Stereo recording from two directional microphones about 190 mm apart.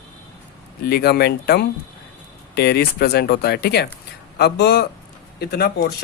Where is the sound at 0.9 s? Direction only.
55° left (ahead or behind).